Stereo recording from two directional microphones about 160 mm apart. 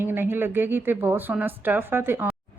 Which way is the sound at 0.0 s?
15° right (ahead or behind).